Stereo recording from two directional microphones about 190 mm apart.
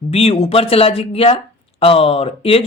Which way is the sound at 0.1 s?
30° left (ahead or behind).